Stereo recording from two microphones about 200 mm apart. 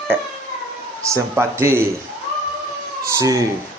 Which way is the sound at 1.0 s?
15° right (ahead or behind).